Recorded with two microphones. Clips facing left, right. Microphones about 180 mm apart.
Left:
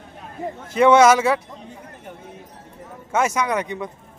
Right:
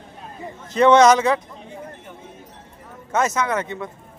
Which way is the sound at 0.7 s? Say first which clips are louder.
Even; 10° left (ahead or behind).